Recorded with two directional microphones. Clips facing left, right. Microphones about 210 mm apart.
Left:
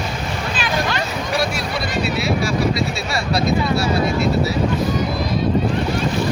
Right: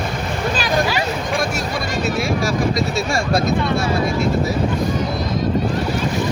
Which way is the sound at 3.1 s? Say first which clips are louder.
Left 1 dB; 50° right (ahead or behind).